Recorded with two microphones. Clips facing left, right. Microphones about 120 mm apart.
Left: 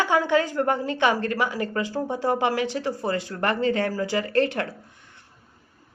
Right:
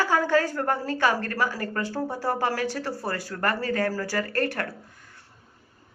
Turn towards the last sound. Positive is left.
turn(degrees=20)  # may be behind; listen again after turning